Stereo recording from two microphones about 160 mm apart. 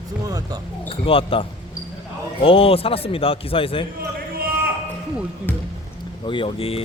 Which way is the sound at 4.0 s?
70° right (ahead or behind).